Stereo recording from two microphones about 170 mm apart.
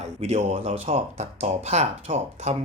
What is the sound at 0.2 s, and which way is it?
Speech, 40° right (ahead or behind).